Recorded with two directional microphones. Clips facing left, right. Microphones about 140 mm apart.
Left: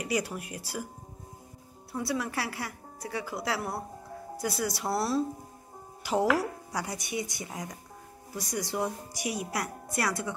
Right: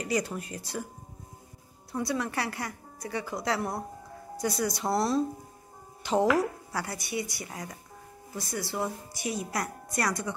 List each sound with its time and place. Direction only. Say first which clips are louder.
0.0 s speech: right 1 dB; 10° left (ahead or behind)
1.9 s speech: right 1 dB; 5° left (ahead or behind)